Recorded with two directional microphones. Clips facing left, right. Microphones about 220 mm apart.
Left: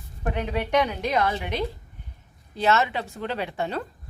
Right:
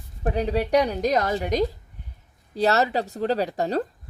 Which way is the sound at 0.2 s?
35° right (ahead or behind).